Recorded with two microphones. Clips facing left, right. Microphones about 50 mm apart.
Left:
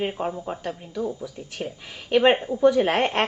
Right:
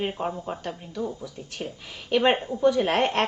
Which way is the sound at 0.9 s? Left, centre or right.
Left.